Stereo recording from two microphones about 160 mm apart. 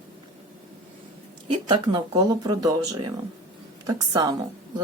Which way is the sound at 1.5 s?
30° right (ahead or behind).